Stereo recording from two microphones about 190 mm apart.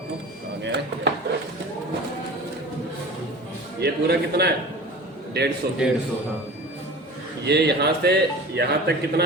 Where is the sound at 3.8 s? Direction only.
60° right (ahead or behind).